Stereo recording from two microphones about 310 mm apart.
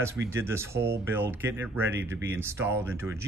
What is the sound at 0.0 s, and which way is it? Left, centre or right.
Speech, centre.